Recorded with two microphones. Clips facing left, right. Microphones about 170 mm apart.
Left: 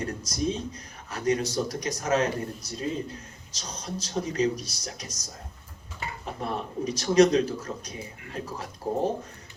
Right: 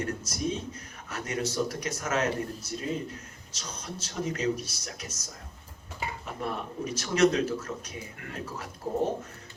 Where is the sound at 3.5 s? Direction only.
30° left (ahead or behind).